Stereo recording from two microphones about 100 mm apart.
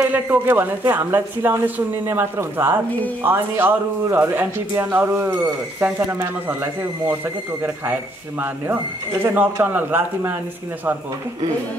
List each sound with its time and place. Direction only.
0.1 s a man's voice: 20° right (ahead or behind)
9.2 s a man's voice: 20° right (ahead or behind)